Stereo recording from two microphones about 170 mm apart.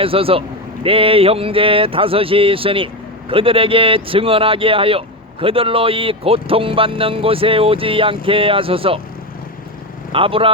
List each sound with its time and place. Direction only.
0.0 s speech: 35° right (ahead or behind)
10.1 s speech: 30° right (ahead or behind)